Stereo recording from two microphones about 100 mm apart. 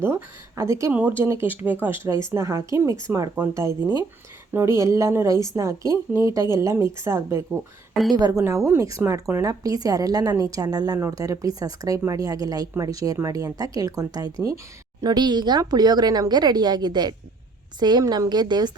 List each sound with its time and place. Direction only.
0.0 s a woman's voice: 25° right (ahead or behind)
2.0 s a woman's voice: 30° right (ahead or behind); by 18.8 s 45° right (ahead or behind)